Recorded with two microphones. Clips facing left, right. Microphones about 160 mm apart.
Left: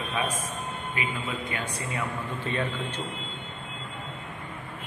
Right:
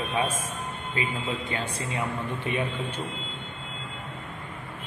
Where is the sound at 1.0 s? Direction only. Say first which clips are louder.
Right 3 dB; 30° right (ahead or behind); by 3.0 s 15° right (ahead or behind).